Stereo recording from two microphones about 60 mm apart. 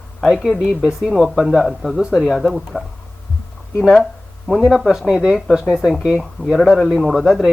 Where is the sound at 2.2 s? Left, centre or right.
Centre.